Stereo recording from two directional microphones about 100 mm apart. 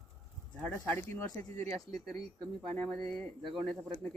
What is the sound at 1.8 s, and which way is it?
Speech, centre (ahead or behind).